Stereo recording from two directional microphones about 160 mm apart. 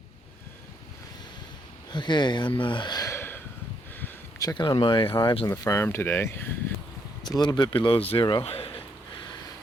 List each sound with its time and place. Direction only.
1.9 s speech: 30° left (ahead or behind)
4.0 s speech: 25° left (ahead or behind)
5.5 s speech: 20° left (ahead or behind)
7.3 s speech: 25° left (ahead or behind)
8.4 s a sound: 35° left (ahead or behind)